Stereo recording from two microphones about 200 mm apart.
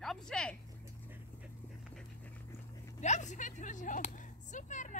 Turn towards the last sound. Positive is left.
turn(degrees=40)  # may be behind; listen again after turning